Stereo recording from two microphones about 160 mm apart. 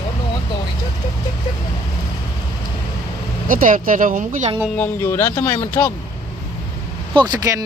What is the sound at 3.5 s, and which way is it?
Speech, 60° right (ahead or behind).